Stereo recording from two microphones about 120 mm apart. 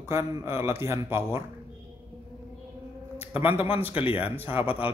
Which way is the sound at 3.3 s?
50° left (ahead or behind).